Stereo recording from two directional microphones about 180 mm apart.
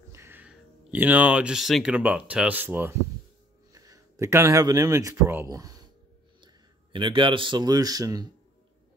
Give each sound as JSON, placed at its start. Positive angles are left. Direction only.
{"t": 0.1, "sound": "speech", "side_deg": -15}